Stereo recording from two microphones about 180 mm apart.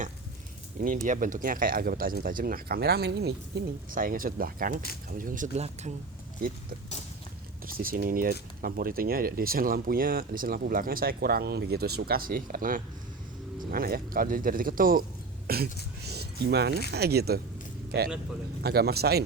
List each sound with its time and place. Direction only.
1.0 s speech: 45° right (ahead or behind)
7.8 s speech: 50° right (ahead or behind)
15.4 s throat clearing: 60° right (ahead or behind)
16.0 s a sound: 65° right (ahead or behind)
16.9 s speech: 65° right (ahead or behind)
18.6 s speech: 60° right (ahead or behind)